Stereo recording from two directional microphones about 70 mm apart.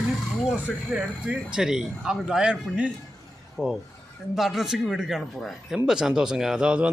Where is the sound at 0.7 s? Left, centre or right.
Centre.